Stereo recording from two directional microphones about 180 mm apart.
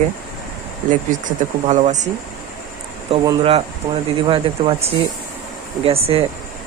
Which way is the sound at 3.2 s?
30° right (ahead or behind).